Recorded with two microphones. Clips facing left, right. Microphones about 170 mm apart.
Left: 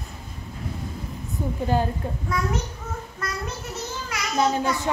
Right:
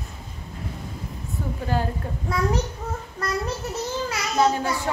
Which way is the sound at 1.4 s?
20° left (ahead or behind).